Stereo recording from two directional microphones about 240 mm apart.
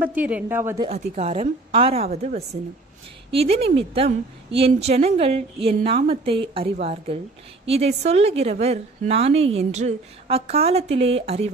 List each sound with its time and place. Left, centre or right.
0.0 s speech: centre
0.8 s a woman's voice: right